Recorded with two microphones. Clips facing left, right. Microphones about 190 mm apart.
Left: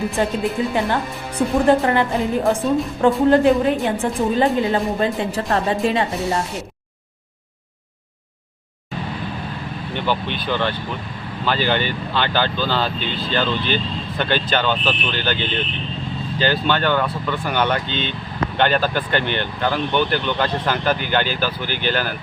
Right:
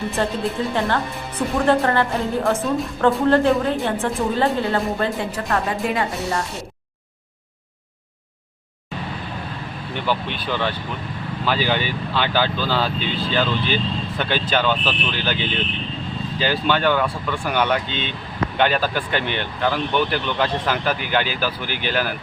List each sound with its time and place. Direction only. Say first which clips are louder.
0.2 s speech: left 2 dB; 15° left (ahead or behind)
9.9 s speech: left 1 dB; centre (ahead or behind)